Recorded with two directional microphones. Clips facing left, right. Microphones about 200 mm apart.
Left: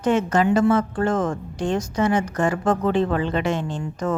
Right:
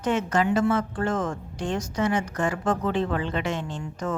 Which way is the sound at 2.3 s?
50° left (ahead or behind).